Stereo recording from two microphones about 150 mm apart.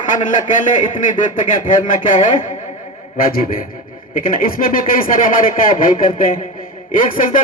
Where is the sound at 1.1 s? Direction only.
60° left (ahead or behind).